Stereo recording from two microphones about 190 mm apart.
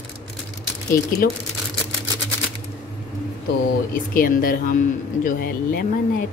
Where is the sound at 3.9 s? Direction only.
50° left (ahead or behind).